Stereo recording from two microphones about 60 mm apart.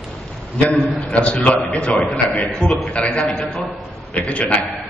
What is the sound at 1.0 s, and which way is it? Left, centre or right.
A man's voice, centre.